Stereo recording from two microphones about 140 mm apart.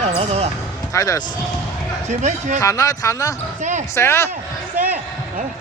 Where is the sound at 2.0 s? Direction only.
55° right (ahead or behind).